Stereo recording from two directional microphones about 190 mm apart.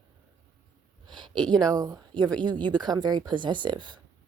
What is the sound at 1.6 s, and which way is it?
Speech, 20° right (ahead or behind).